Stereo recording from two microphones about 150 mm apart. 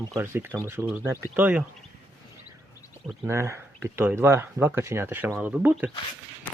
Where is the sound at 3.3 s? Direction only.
15° right (ahead or behind).